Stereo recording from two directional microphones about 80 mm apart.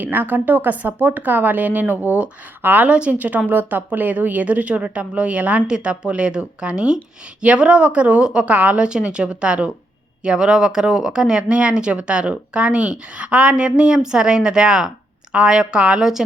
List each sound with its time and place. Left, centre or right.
0.0 s speech: right; by 16.2 s centre